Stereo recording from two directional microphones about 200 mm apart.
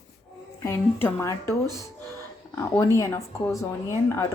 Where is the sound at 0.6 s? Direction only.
15° left (ahead or behind).